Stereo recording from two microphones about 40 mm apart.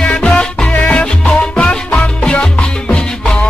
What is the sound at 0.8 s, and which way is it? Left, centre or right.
Music, left.